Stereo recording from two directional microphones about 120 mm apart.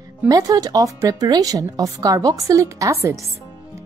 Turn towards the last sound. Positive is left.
turn(degrees=-25)  # may be behind; listen again after turning